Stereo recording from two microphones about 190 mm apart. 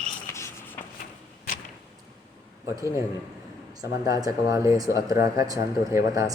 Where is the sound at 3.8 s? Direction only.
20° right (ahead or behind).